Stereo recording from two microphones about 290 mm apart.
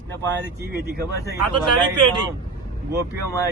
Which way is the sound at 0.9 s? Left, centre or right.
Right.